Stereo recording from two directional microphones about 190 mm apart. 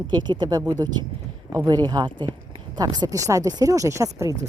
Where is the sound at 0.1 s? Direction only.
25° right (ahead or behind).